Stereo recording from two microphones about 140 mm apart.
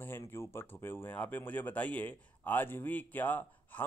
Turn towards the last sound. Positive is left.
turn(degrees=10)  # may be behind; listen again after turning